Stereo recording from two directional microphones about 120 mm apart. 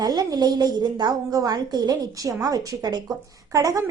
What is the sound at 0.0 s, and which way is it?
A woman's voice, 35° right (ahead or behind).